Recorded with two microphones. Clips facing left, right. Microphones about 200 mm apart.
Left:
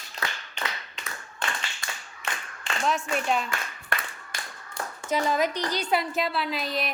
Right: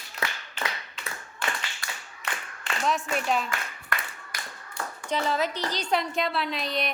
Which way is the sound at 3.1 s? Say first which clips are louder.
Even; centre (ahead or behind).